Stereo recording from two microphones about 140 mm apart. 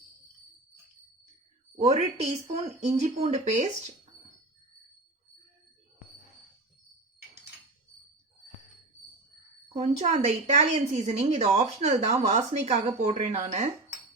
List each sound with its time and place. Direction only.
1.7 s a woman's voice: 55° right (ahead or behind)
9.8 s a woman's voice: 55° right (ahead or behind)